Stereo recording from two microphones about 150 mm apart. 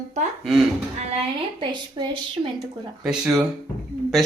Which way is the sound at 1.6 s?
35° right (ahead or behind).